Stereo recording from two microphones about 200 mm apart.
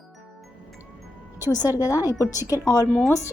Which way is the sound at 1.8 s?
15° left (ahead or behind).